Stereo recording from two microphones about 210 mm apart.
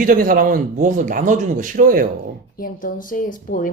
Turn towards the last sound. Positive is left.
turn(degrees=40)  # may be behind; listen again after turning